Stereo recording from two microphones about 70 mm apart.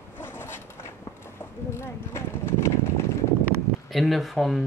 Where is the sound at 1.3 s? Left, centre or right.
Left.